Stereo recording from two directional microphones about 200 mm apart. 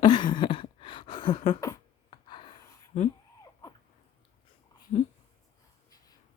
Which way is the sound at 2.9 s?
35° left (ahead or behind).